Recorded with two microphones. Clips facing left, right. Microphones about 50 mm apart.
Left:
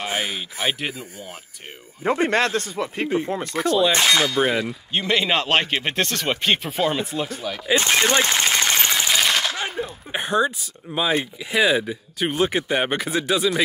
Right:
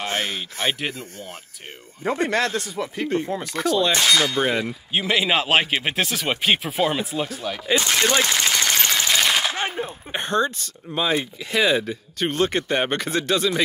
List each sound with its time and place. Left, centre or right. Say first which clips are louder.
0.0 s speech: even; centre
2.0 s speech: left 2 dB; left
3.9 s speech: left 1 dB; left
4.4 s speech: left 1 dB; centre
7.7 s speech: left 1 dB; left
8.8 s a sound: even; centre
9.1 s machine gun: right 1 dB; centre
9.8 s a sound: even; right
10.1 s speech: left 1 dB; centre